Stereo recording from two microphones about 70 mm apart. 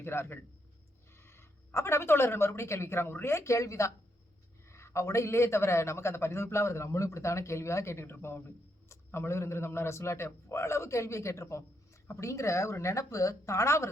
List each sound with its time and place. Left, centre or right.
0.0 s a man's voice: left